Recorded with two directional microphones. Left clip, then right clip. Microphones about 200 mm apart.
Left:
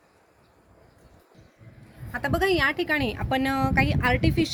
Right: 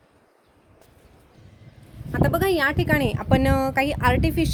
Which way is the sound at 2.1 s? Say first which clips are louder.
Right 2 dB; 50° right (ahead or behind).